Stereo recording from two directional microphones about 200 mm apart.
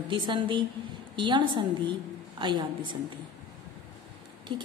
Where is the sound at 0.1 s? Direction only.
25° right (ahead or behind).